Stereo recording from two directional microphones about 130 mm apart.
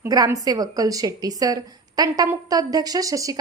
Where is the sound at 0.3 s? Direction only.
25° right (ahead or behind).